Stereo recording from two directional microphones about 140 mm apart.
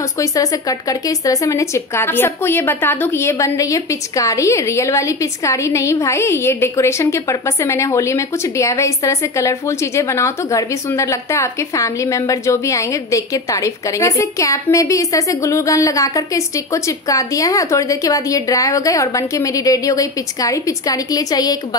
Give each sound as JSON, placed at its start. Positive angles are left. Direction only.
{"t": 0.2, "sound": "speech", "side_deg": 25}